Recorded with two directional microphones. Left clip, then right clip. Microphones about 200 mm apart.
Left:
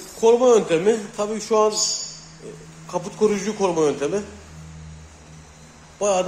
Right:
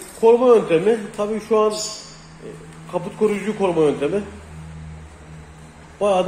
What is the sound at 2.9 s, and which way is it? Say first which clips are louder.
Speech: even; 15° left (ahead or behind).